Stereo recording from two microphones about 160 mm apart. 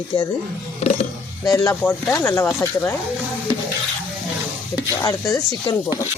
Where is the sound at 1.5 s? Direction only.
20° left (ahead or behind).